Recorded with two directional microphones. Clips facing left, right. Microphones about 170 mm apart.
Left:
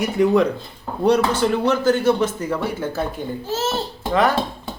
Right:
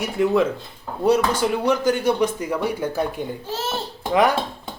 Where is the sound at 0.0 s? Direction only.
Centre (ahead or behind).